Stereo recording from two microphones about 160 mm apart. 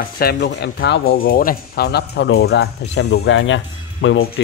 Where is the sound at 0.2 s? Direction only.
80° left.